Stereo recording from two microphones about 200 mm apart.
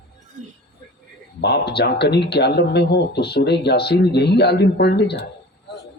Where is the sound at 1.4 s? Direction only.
55° left (ahead or behind).